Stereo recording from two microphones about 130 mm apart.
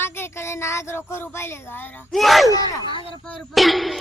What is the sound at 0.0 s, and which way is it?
Speech, 20° left (ahead or behind).